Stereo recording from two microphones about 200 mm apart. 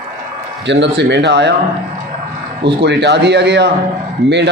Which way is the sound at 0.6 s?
60° right (ahead or behind).